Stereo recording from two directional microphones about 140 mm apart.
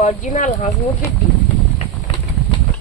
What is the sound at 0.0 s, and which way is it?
Speech, 60° left (ahead or behind).